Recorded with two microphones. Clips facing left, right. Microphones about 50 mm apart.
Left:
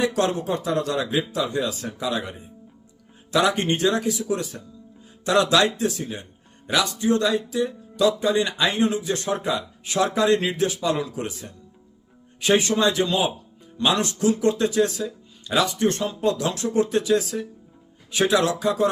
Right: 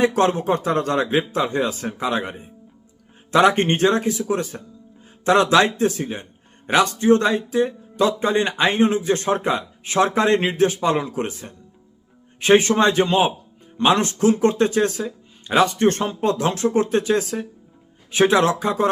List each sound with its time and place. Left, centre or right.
0.0 s speech: right